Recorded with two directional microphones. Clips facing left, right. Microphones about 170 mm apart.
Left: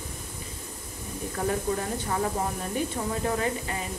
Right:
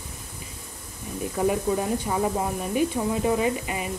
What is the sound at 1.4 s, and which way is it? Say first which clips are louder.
Speech: right 4 dB; 10° right (ahead or behind).